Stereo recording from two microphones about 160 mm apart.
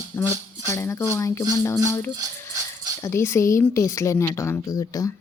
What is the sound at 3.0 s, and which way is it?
Speech, 15° left (ahead or behind).